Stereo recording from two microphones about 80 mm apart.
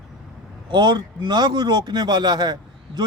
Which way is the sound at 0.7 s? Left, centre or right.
Right.